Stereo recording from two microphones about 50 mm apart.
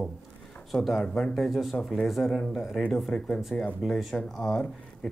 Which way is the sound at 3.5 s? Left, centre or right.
Centre.